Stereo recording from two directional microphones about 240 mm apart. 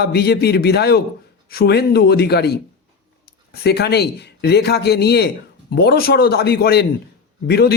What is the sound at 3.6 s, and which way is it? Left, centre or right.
Speech, left.